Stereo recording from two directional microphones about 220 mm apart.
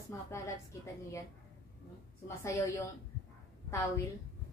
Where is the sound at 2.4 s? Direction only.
15° left (ahead or behind).